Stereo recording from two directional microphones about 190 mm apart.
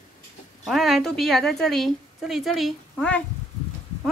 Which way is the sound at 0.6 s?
Centre (ahead or behind).